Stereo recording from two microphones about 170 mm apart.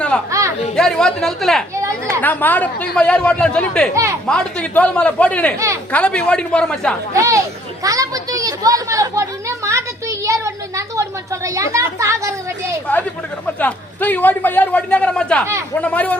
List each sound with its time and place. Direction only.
0.3 s a sound: 20° right (ahead or behind)
0.8 s speech: 5° left (ahead or behind)
1.7 s chatter: 15° right (ahead or behind)
2.2 s a man's voice: 10° left (ahead or behind)
3.9 s speech: 20° right (ahead or behind)
4.3 s a man's voice: 5° left (ahead or behind)
5.5 s speech: 15° right (ahead or behind)
5.9 s a man's voice: 5° left (ahead or behind)
7.1 s speech: 20° right (ahead or behind)
7.9 s chatter: 20° right (ahead or behind)
11.4 s a sound: 15° right (ahead or behind)
13.6 s a man's voice: 10° left (ahead or behind)